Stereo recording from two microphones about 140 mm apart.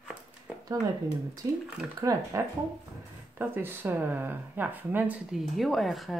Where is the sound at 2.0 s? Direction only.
25° right (ahead or behind).